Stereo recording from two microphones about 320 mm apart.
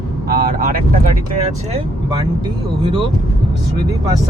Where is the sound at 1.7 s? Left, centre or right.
Centre.